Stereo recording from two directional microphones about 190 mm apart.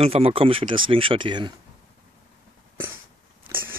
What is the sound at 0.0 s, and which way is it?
Speech, 30° right (ahead or behind).